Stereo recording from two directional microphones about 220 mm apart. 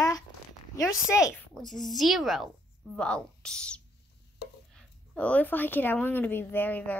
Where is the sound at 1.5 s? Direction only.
Centre (ahead or behind).